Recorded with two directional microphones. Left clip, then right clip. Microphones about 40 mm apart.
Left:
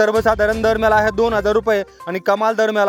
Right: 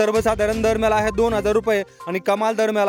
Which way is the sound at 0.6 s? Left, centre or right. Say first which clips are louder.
Left 3 dB; right.